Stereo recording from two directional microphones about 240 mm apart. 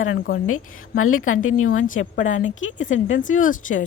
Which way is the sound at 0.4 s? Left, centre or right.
Left.